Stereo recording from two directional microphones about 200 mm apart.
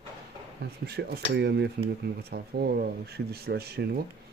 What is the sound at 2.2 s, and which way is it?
Speech, 50° right (ahead or behind).